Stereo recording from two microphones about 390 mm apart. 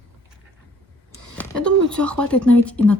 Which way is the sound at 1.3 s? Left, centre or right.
Centre.